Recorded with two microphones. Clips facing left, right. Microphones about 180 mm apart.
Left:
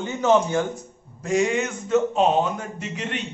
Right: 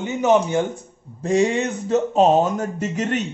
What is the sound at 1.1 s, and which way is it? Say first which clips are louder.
A man's voice: right 3 dB; 30° right (ahead or behind).